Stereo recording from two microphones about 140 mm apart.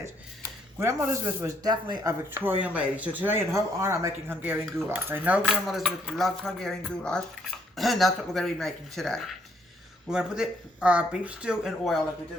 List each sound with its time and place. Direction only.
0.8 s speech: 20° right (ahead or behind)
1.7 s speech: 30° right (ahead or behind)
2.3 s speech: 15° right (ahead or behind)